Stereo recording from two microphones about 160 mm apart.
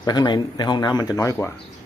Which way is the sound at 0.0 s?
25° left (ahead or behind).